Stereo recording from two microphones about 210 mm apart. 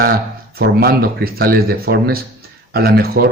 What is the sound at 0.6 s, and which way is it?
Speech, 50° right (ahead or behind).